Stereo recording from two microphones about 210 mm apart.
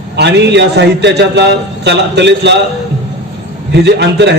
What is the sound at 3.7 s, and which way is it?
Speech, 55° right (ahead or behind).